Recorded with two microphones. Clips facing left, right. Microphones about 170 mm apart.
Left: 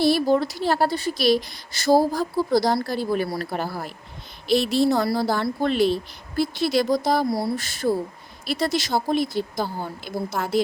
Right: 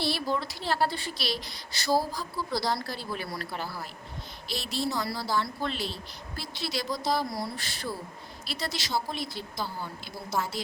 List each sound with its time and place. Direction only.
0.0 s speech: 45° left (ahead or behind)
4.4 s speech: 65° left (ahead or behind)
7.3 s speech: 35° left (ahead or behind); by 10.6 s 55° left (ahead or behind)